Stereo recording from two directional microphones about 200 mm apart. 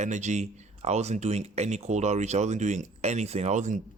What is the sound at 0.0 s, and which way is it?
Speech, 35° right (ahead or behind).